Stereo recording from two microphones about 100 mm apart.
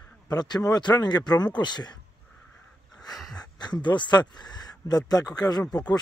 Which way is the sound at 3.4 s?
45° left (ahead or behind).